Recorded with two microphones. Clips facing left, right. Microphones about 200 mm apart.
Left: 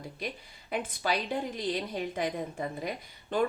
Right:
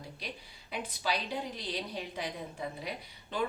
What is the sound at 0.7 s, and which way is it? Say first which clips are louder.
A woman's voice: left 4 dB; 50° left (ahead or behind).